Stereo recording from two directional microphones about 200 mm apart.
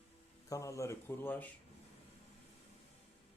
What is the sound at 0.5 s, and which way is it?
Speech, 15° left (ahead or behind).